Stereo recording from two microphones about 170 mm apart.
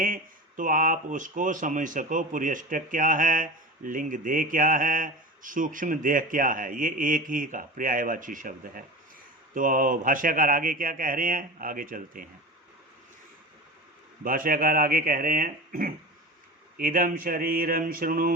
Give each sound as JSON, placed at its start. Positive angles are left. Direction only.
{"t": 0.0, "sound": "speech", "side_deg": -50}
{"t": 14.3, "sound": "speech", "side_deg": -55}